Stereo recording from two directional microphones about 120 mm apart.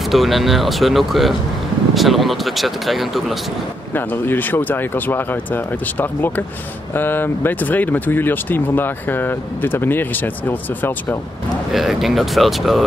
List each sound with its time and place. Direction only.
0.0 s speech: centre (ahead or behind)
3.9 s speech: 15° left (ahead or behind)
11.7 s speech: centre (ahead or behind)